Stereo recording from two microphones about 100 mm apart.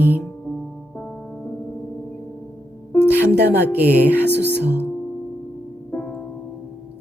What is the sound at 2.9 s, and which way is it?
Music, 20° left (ahead or behind).